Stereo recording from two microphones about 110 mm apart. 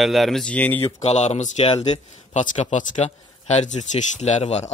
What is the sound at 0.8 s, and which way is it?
A man's voice, 85° left.